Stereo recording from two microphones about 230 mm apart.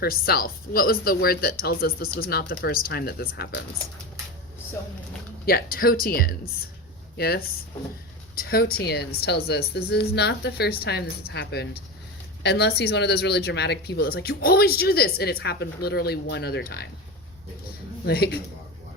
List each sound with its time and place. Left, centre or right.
0.0 s speech: left
5.5 s speech: left
18.0 s speech: left